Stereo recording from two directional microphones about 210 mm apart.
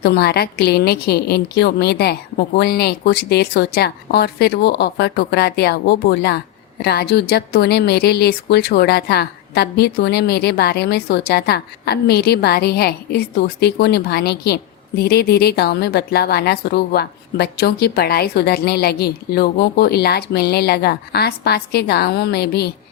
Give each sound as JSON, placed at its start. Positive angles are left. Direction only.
{"t": 0.0, "sound": "speech", "side_deg": 50}